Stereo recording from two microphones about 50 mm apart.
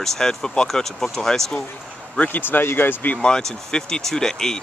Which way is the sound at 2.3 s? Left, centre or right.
Left.